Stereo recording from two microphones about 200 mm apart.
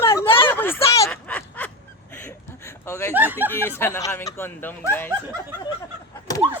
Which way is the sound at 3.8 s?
15° left (ahead or behind).